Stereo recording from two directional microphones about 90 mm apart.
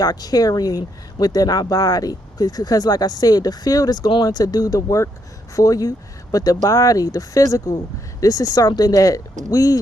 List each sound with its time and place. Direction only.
0.0 s speech: 45° left (ahead or behind)